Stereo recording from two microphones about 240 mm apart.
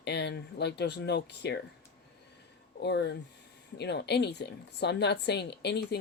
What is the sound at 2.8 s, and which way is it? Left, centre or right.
A woman's voice, left.